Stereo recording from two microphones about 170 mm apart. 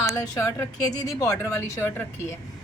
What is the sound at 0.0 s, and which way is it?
A woman's voice, 20° left (ahead or behind).